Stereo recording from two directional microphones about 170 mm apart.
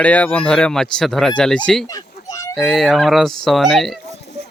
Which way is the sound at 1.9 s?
20° left (ahead or behind).